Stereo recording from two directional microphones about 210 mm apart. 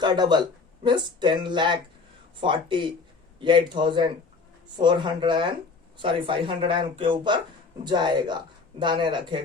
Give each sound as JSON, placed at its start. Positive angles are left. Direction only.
{"t": 0.0, "sound": "speech", "side_deg": -20}